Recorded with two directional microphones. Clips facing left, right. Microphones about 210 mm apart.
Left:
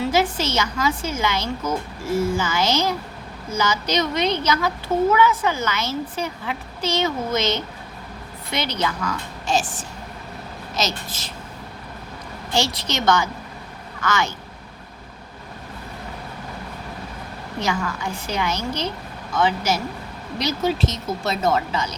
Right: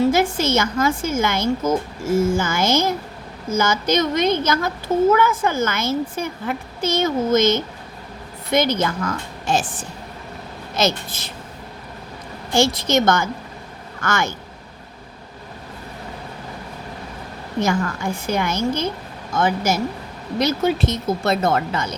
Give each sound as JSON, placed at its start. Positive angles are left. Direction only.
{"t": 0.0, "sound": "a woman's voice", "side_deg": -50}
{"t": 10.8, "sound": "speech", "side_deg": -55}
{"t": 12.5, "sound": "a woman's voice", "side_deg": -50}
{"t": 17.6, "sound": "a woman's voice", "side_deg": -50}